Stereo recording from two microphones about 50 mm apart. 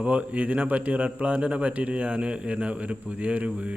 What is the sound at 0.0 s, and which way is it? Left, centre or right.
A man's voice, right.